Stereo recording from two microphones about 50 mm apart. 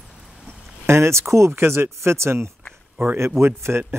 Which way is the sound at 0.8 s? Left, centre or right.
Right.